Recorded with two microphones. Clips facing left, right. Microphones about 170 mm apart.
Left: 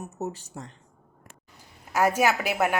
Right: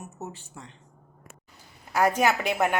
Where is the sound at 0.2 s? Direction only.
40° left (ahead or behind).